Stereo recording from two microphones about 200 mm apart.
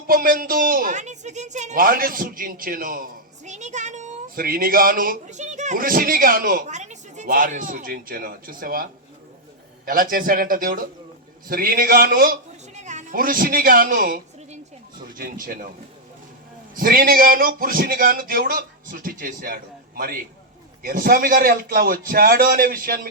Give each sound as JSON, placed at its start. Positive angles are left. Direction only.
{"t": 0.1, "sound": "a man's voice", "side_deg": -45}
{"t": 15.2, "sound": "a man's voice", "side_deg": -45}
{"t": 16.7, "sound": "a man's voice", "side_deg": -45}